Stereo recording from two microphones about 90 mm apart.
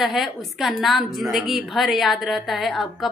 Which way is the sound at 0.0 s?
Centre (ahead or behind).